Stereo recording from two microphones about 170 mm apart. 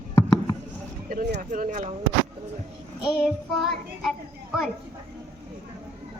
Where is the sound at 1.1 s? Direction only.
85° right.